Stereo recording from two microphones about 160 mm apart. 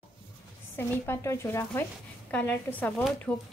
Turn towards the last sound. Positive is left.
turn(degrees=5)  # may be behind; listen again after turning